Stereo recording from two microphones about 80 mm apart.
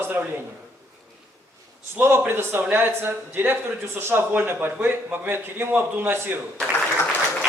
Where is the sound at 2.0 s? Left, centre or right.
Right.